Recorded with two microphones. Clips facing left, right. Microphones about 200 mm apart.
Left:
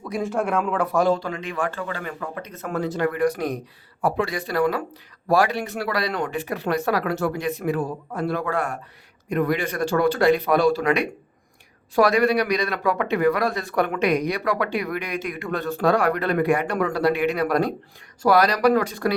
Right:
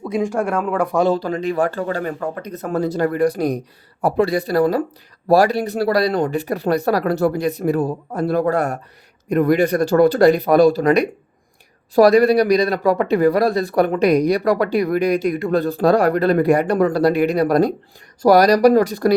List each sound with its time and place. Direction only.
0.0 s speech: 20° right (ahead or behind)
0.9 s speech: 25° right (ahead or behind)
1.2 s speech: 35° right (ahead or behind)